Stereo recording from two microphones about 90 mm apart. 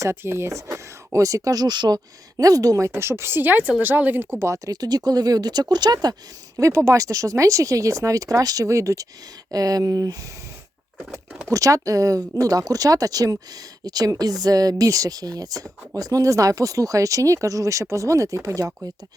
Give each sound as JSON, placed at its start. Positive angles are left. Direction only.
{"t": 0.0, "sound": "speech", "side_deg": -30}
{"t": 6.6, "sound": "speech", "side_deg": -35}
{"t": 11.5, "sound": "speech", "side_deg": -40}